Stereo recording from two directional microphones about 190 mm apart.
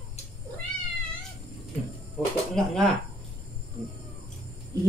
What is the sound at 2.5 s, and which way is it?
Speech, centre (ahead or behind).